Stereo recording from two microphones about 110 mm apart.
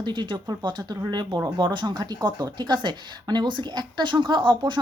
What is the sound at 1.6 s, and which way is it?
A woman's voice, 45° right (ahead or behind).